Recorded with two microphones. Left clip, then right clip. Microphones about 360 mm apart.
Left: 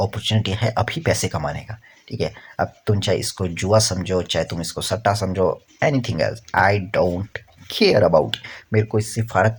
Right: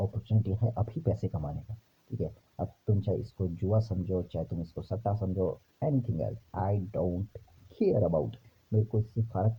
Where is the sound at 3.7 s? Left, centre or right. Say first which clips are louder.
Left 16 dB; right.